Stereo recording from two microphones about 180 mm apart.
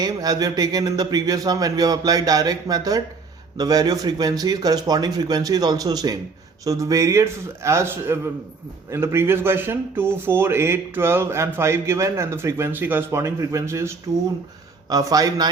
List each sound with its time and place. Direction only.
0.0 s speech: 20° right (ahead or behind)